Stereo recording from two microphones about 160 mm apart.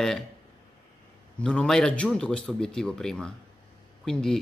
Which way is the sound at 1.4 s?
5° left (ahead or behind).